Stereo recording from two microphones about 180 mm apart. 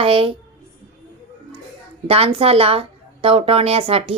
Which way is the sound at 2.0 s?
35° right (ahead or behind).